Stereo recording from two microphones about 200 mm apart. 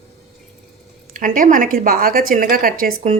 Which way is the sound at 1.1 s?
40° right (ahead or behind).